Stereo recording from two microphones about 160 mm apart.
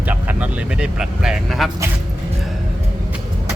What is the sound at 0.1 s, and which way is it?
Vehicle, 10° right (ahead or behind).